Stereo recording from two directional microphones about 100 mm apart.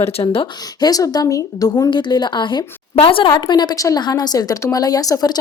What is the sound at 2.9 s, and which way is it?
Speech, 65° left (ahead or behind).